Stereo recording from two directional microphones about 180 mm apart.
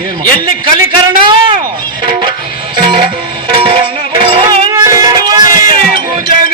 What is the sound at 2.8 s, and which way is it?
Music, 25° right (ahead or behind).